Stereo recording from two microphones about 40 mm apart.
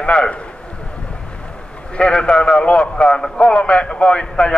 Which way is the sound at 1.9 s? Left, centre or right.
Left.